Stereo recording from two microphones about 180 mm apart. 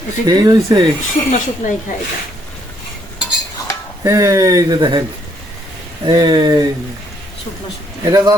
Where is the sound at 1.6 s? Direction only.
45° left (ahead or behind).